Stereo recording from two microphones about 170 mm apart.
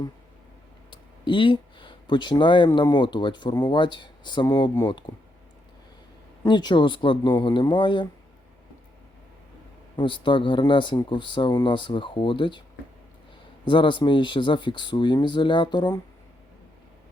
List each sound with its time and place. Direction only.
0.9 s speech: 30° left (ahead or behind)
6.4 s speech: 25° left (ahead or behind)
10.0 s speech: 30° left (ahead or behind)
13.7 s speech: 30° left (ahead or behind)